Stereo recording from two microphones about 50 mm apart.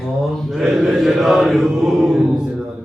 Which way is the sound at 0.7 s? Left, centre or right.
Centre.